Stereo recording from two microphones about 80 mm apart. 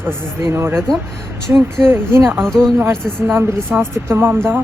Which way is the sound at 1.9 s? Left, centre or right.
Right.